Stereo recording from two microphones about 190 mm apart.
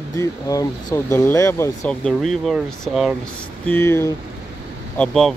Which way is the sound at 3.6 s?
10° left (ahead or behind).